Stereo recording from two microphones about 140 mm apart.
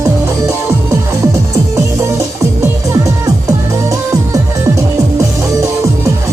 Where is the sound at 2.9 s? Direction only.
25° right (ahead or behind).